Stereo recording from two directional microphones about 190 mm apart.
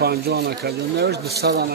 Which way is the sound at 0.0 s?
55° right (ahead or behind).